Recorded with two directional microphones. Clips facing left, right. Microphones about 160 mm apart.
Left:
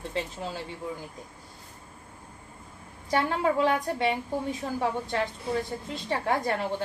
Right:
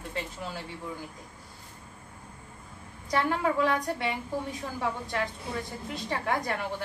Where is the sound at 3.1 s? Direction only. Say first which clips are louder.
Left 2 dB; 25° left (ahead or behind).